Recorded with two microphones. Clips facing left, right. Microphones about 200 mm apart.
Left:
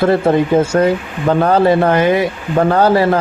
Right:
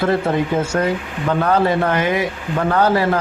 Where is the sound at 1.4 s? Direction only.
30° left (ahead or behind).